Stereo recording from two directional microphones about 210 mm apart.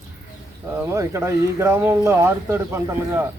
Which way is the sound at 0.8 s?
10° right (ahead or behind).